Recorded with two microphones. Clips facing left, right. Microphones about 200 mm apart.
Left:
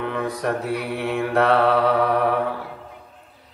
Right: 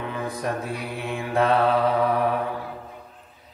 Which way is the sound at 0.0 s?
65° left (ahead or behind).